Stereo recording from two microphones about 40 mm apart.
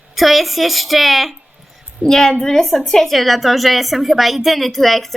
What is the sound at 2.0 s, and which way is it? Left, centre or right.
A woman's voice, centre.